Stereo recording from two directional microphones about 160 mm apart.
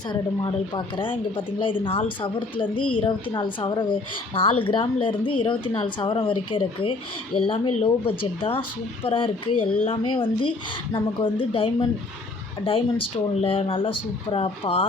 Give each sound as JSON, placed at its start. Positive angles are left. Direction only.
{"t": 0.1, "sound": "speech", "side_deg": 30}
{"t": 13.4, "sound": "speech", "side_deg": 35}